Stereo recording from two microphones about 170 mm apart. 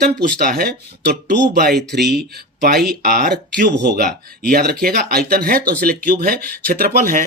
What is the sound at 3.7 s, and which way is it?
Speech, 80° right.